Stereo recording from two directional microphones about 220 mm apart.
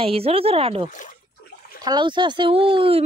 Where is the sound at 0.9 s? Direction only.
35° left (ahead or behind).